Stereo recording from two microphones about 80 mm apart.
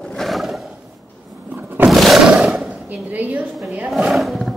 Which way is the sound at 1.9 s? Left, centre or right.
Centre.